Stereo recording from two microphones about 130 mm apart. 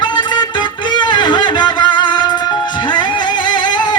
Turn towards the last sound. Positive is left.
turn(degrees=35)  # may be behind; listen again after turning